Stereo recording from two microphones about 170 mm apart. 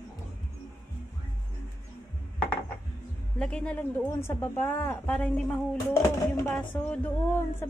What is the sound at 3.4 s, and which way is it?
Speech, 5° left (ahead or behind).